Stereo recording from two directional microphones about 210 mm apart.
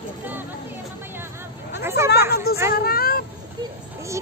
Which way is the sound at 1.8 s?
15° right (ahead or behind).